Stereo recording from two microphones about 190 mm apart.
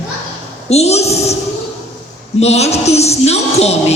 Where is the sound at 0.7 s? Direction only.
35° left (ahead or behind).